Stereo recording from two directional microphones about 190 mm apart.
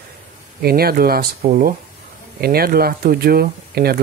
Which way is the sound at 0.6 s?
55° right (ahead or behind).